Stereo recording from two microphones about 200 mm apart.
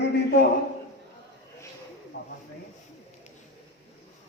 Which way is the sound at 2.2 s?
55° left (ahead or behind).